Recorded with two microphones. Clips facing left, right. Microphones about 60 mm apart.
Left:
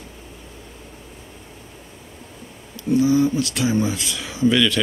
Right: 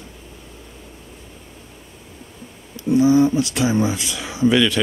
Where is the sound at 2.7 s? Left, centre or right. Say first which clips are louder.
Right 3 dB; right.